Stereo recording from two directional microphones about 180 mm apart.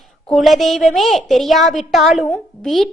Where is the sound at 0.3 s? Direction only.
Centre (ahead or behind).